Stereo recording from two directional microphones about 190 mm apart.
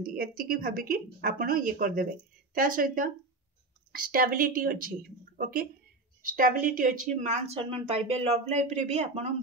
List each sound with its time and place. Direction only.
0.0 s a woman's voice: 50° right (ahead or behind); by 9.3 s 35° right (ahead or behind)